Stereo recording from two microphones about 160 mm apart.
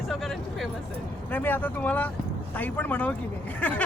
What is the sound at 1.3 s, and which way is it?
Snicker, 10° left (ahead or behind).